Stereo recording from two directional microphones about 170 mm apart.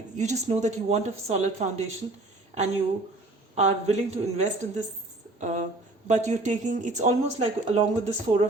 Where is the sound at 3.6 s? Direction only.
40° right (ahead or behind).